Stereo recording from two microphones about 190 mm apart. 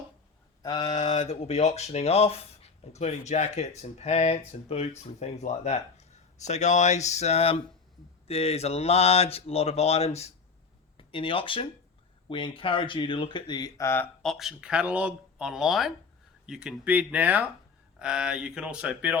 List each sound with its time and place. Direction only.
0.6 s speech: 25° left (ahead or behind); by 19.2 s 5° right (ahead or behind)